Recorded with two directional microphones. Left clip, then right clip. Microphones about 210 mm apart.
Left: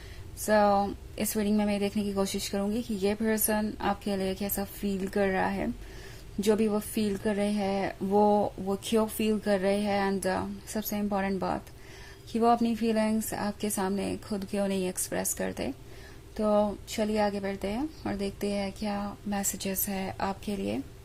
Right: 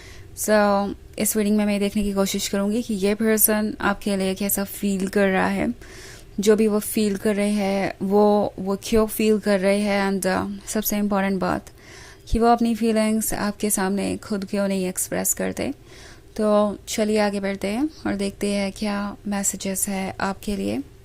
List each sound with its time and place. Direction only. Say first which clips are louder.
0.4 s a woman's voice: right 5 dB; 30° right (ahead or behind)